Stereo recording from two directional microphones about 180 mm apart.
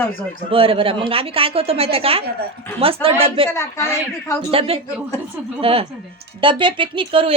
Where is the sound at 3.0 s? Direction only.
10° left (ahead or behind).